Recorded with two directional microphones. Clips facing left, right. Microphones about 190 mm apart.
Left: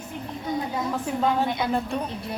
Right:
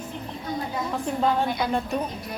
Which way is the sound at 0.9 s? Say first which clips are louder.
Right 1 dB; centre (ahead or behind).